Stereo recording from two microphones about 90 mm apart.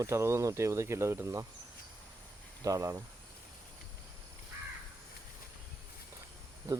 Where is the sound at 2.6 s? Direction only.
40° right (ahead or behind).